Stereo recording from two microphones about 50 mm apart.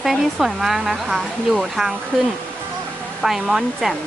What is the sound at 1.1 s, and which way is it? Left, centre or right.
Speech, centre.